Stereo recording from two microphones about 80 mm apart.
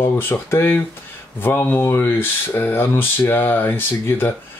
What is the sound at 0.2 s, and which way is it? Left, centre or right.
Speech, left.